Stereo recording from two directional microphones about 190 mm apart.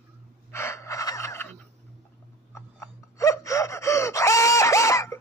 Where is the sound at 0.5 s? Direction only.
15° left (ahead or behind).